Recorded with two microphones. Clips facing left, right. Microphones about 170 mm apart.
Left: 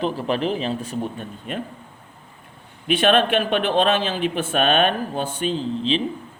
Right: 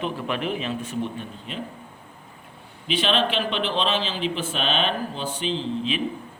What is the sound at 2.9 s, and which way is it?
A man's voice, 55° left (ahead or behind).